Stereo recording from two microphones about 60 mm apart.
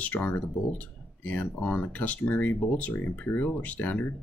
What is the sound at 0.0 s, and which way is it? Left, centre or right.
Speech, left.